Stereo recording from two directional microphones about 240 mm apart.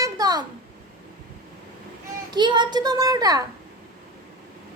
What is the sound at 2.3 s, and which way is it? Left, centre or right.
A woman's voice, centre.